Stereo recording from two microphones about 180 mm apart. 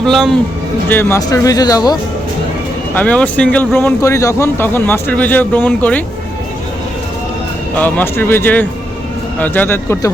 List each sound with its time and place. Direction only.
0.0 s a man's voice: centre (ahead or behind)
0.9 s speech: 10° left (ahead or behind)
2.9 s speech: 10° left (ahead or behind)
7.8 s speech: 10° left (ahead or behind)